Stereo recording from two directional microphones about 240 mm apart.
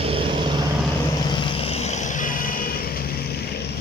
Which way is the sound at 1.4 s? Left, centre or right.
Left.